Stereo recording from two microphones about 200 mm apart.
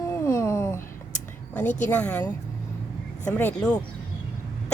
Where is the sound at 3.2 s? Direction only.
5° left (ahead or behind).